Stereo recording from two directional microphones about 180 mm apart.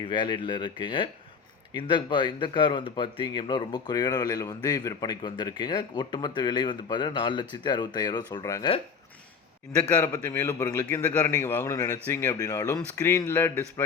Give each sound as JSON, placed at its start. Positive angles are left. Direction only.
{"t": 0.0, "sound": "speech", "side_deg": 25}
{"t": 10.0, "sound": "a man's voice", "side_deg": 15}